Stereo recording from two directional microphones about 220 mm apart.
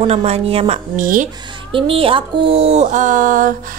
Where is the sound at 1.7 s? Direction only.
25° right (ahead or behind).